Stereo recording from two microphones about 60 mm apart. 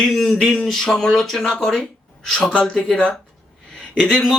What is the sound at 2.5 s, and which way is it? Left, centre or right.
Speech, centre.